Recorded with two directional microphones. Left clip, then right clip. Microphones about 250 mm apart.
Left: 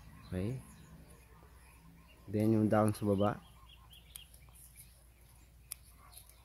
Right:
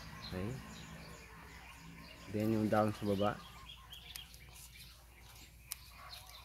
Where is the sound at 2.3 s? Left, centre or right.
Left.